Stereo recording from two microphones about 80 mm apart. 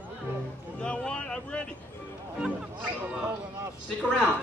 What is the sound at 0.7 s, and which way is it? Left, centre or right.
Vehicle, centre.